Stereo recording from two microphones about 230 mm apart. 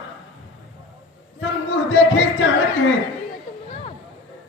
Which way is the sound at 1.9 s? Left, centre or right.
Left.